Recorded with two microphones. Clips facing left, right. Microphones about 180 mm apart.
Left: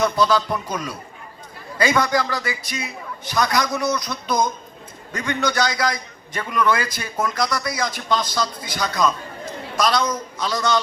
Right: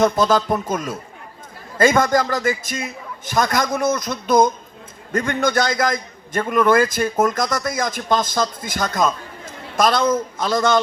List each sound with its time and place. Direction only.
0.0 s a man's voice: 45° right (ahead or behind)